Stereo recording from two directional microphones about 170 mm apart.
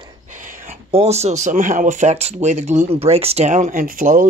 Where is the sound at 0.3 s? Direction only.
50° right (ahead or behind).